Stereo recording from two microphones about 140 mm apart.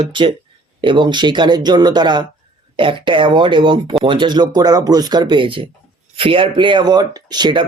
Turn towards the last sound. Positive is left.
turn(degrees=-30)  # may be behind; listen again after turning